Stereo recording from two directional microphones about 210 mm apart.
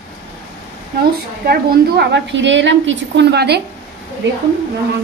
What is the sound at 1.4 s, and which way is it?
A woman's voice, 50° right (ahead or behind).